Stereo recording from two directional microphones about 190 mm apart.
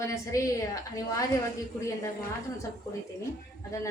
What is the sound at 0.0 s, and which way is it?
A woman's voice, 15° left (ahead or behind).